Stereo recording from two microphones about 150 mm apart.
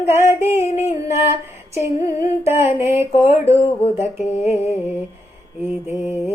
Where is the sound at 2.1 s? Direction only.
20° right (ahead or behind).